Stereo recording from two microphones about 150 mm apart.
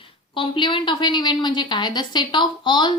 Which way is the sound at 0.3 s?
35° left (ahead or behind).